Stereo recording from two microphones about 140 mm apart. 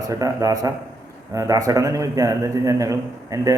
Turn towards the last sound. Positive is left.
turn(degrees=-25)  # may be behind; listen again after turning